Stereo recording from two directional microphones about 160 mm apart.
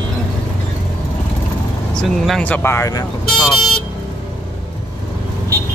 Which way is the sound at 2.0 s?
Centre (ahead or behind).